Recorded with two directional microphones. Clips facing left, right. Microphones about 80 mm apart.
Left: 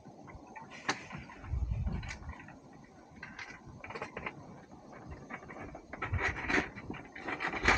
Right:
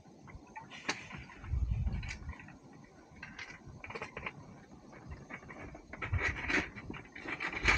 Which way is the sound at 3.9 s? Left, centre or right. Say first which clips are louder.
Left 2 dB; left.